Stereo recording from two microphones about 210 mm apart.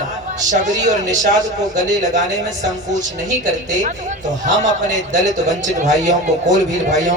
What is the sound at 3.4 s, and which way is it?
A man's voice, 40° right (ahead or behind).